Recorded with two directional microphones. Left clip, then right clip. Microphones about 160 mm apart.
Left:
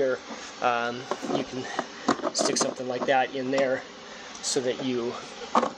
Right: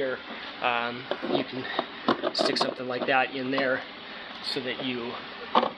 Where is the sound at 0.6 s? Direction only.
50° left (ahead or behind).